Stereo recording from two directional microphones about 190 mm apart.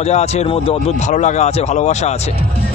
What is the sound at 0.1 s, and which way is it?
Speech, 35° left (ahead or behind).